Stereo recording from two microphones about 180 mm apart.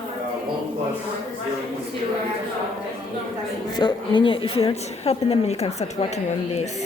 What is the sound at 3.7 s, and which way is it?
A woman's voice, 25° left (ahead or behind).